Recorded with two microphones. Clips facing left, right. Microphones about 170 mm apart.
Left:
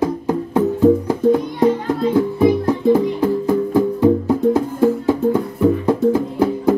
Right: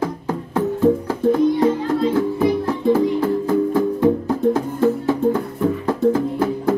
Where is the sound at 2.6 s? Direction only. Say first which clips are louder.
Left 2 dB; 15° left (ahead or behind).